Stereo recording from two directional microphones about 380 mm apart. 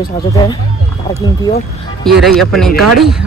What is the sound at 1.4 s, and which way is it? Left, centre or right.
Speech, centre.